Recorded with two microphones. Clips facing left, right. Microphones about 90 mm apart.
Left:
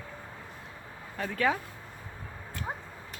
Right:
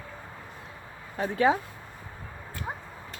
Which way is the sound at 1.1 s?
30° right (ahead or behind).